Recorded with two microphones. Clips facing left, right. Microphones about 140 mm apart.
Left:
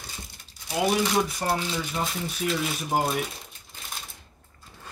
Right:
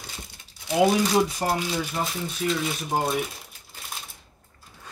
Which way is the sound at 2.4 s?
5° left (ahead or behind).